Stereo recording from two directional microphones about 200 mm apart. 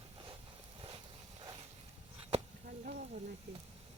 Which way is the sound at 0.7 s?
25° right (ahead or behind).